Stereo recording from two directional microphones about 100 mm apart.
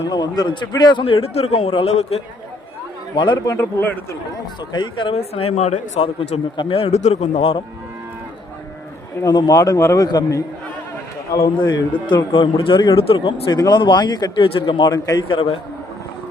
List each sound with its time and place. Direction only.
0.1 s a man's voice: 45° left (ahead or behind)
1.0 s a man's voice: 80° left
3.3 s speech: 30° left (ahead or behind)
4.7 s a man's voice: 50° left (ahead or behind)
5.1 s speech: 85° left
9.2 s a man's voice: 35° left (ahead or behind)
11.4 s a man's voice: 45° left (ahead or behind)
13.0 s speech: 65° left (ahead or behind)
13.5 s a man's voice: 45° left (ahead or behind)
14.4 s speech: 60° left (ahead or behind)
14.8 s a man's voice: 35° left (ahead or behind)
15.3 s speech: 65° left (ahead or behind)